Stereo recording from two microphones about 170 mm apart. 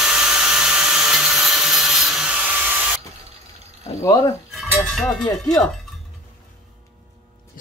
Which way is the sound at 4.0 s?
20° left (ahead or behind).